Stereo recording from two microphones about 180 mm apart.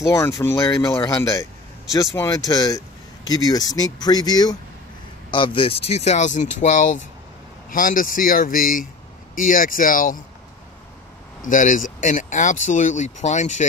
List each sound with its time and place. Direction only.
0.0 s speech: 15° left (ahead or behind); by 10.2 s 50° left (ahead or behind)
11.4 s speech: 45° left (ahead or behind)